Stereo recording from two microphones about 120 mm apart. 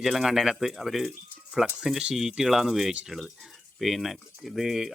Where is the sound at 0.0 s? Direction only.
Centre (ahead or behind).